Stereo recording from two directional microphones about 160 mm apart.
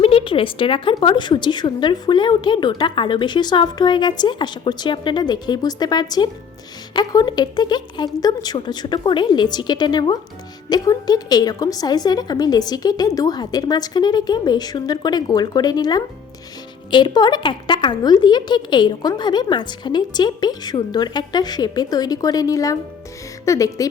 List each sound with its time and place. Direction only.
0.0 s a woman's voice: 35° left (ahead or behind); by 23.9 s 20° left (ahead or behind)